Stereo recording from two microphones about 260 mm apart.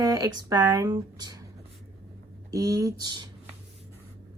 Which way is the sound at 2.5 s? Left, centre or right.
Centre.